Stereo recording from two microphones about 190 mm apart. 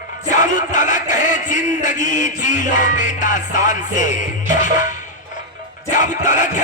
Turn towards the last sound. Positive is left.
turn(degrees=40)  # may be behind; listen again after turning